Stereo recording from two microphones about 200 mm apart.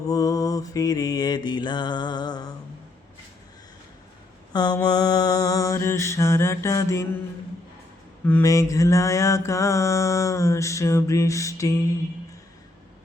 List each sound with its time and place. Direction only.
0.1 s mantra: 20° left (ahead or behind)
4.5 s mantra: 20° left (ahead or behind)
8.3 s mantra: 15° left (ahead or behind)